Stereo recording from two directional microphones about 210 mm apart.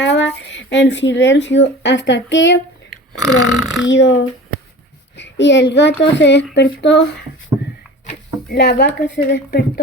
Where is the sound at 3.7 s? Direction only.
60° left (ahead or behind).